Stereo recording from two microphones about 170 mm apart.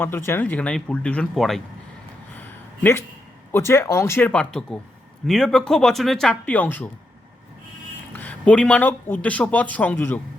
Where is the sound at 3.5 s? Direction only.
15° left (ahead or behind).